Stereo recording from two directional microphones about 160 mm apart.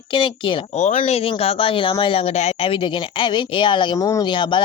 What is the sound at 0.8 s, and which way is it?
Speech, 45° left (ahead or behind).